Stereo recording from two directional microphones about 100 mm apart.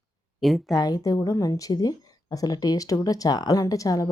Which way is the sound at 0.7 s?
40° left (ahead or behind).